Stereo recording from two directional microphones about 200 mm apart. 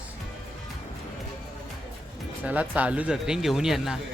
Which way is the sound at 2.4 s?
5° right (ahead or behind).